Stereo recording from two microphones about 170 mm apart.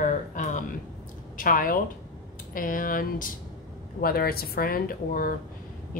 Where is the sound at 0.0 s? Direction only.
50° left (ahead or behind).